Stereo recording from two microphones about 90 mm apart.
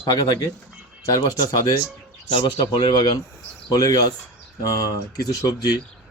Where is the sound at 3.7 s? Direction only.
45° left (ahead or behind).